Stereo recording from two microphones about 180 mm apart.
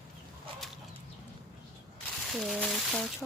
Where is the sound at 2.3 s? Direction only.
Centre (ahead or behind).